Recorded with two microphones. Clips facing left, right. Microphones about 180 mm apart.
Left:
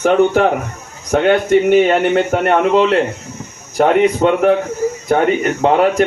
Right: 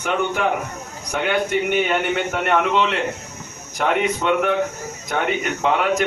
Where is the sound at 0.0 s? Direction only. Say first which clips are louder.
Left 10 dB; 40° left (ahead or behind).